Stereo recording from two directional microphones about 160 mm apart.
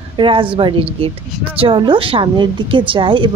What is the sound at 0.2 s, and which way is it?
Speech, 35° right (ahead or behind).